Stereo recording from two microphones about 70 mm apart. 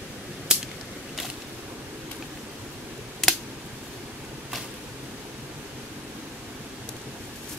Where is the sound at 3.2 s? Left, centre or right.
Centre.